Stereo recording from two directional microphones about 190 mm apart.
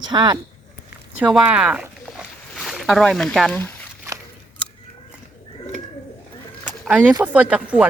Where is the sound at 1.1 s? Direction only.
5° right (ahead or behind).